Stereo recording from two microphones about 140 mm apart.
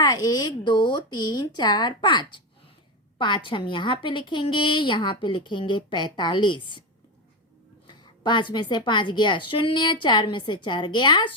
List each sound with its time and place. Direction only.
0.0 s a woman's voice: 25° left (ahead or behind)
7.9 s a woman's voice: 35° left (ahead or behind)